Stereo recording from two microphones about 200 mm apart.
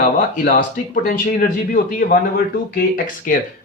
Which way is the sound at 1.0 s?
45° left (ahead or behind).